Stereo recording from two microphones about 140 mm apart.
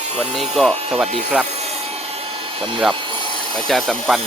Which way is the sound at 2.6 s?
35° right (ahead or behind).